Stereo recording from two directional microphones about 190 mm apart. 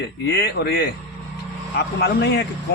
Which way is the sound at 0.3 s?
60° left (ahead or behind).